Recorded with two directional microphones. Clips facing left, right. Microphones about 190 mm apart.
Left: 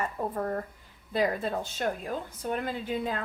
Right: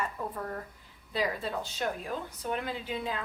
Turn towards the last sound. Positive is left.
turn(degrees=45)  # may be behind; listen again after turning